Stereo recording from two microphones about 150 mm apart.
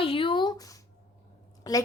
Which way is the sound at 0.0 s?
35° left (ahead or behind).